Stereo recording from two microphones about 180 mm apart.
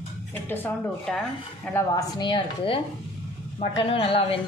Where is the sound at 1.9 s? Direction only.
20° left (ahead or behind).